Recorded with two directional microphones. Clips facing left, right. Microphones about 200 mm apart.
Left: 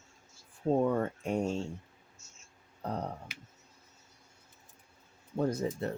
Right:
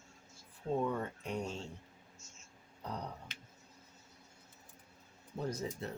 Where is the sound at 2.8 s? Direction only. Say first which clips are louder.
Left 7 dB; 55° left (ahead or behind).